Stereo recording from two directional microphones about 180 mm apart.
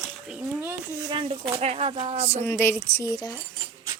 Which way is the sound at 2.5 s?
15° left (ahead or behind).